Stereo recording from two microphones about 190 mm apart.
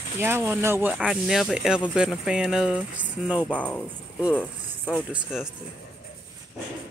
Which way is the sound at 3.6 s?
5° left (ahead or behind).